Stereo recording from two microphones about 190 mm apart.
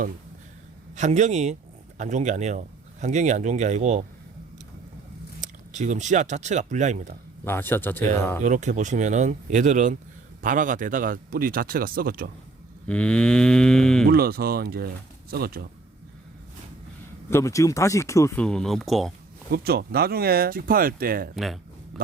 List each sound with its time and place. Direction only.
0.9 s speech: 40° right (ahead or behind)
5.4 s speech: 40° right (ahead or behind)
7.4 s speech: 10° left (ahead or behind)
8.4 s speech: 40° right (ahead or behind)
12.9 s livestock: 5° left (ahead or behind)
14.1 s speech: 55° right (ahead or behind)
17.2 s speech: 15° left (ahead or behind)
18.4 s livestock: centre (ahead or behind)
19.5 s speech: 55° right (ahead or behind)
21.3 s livestock: centre (ahead or behind)
21.9 s a sound: centre (ahead or behind)